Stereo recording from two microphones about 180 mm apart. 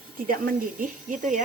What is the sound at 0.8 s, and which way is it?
Speech, 45° right (ahead or behind).